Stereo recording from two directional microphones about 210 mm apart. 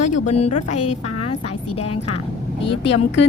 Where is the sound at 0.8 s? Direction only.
90° left.